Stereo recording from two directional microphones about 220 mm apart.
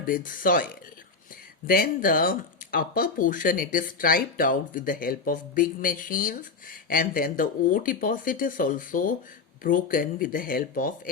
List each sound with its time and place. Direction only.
0.0 s speech: 40° left (ahead or behind)